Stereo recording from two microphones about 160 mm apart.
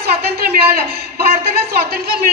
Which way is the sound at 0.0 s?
80° right.